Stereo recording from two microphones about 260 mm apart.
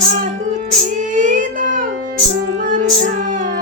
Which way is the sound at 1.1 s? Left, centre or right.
Right.